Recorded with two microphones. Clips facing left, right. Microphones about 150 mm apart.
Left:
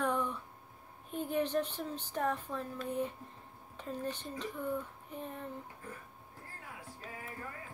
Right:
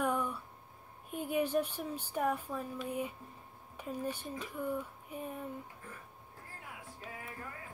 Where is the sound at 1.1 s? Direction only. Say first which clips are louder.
Right 1 dB; 10° right (ahead or behind).